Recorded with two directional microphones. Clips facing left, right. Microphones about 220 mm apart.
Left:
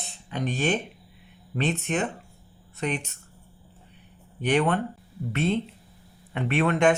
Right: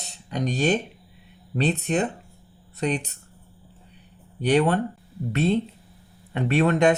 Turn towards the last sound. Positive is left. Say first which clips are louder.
# right 2 dB
turn(degrees=-40)  # may be behind; listen again after turning